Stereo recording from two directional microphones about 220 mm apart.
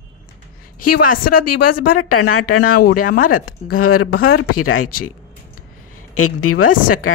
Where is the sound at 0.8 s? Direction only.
90° left.